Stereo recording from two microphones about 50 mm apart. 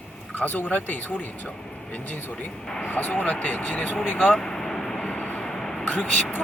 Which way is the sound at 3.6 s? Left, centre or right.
Centre.